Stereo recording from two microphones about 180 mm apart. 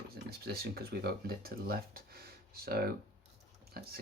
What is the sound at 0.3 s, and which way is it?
Speech, 60° right (ahead or behind).